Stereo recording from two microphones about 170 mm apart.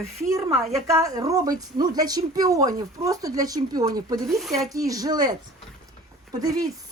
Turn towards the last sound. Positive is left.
turn(degrees=-20)  # may be behind; listen again after turning